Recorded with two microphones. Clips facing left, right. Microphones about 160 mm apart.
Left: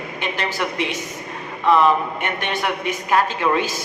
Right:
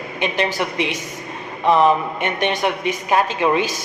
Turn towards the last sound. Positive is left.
turn(degrees=-20)  # may be behind; listen again after turning